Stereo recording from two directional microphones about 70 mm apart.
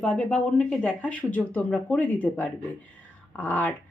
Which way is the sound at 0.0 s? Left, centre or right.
Centre.